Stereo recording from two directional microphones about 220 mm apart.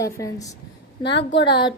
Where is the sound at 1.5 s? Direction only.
20° left (ahead or behind).